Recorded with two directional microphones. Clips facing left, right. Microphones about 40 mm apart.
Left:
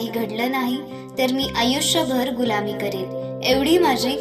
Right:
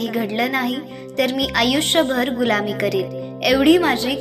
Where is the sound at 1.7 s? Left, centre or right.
Right.